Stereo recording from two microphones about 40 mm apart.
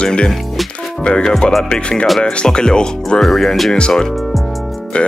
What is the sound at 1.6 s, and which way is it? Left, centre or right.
Speech, left.